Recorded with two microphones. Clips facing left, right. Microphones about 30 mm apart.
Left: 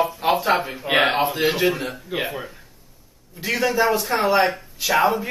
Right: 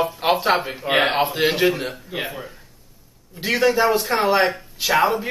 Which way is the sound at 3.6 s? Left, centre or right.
Centre.